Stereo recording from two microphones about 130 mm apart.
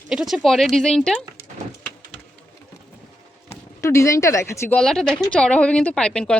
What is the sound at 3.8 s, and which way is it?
Speech, 25° left (ahead or behind).